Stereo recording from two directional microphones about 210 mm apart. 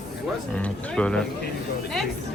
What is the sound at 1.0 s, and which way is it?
Speech, 5° left (ahead or behind).